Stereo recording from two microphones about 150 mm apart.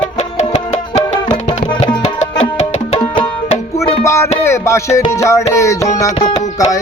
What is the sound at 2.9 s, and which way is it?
Music, 35° left (ahead or behind).